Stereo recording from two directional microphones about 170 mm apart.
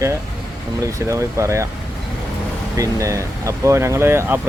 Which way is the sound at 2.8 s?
20° right (ahead or behind).